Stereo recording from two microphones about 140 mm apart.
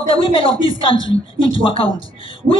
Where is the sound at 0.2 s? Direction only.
40° left (ahead or behind).